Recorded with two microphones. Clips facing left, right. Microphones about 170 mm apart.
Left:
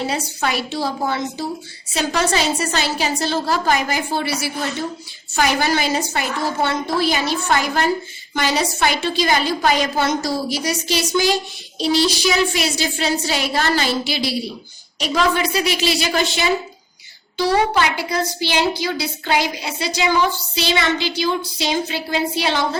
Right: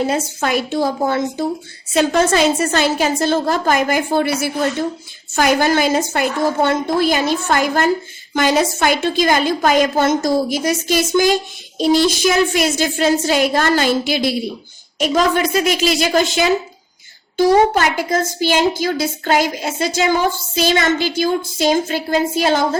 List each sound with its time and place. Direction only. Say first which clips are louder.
0.4 s a woman's voice: right 4 dB; 50° right (ahead or behind)